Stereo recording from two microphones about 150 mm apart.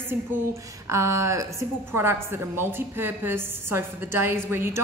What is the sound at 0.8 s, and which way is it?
A woman's voice, 20° right (ahead or behind).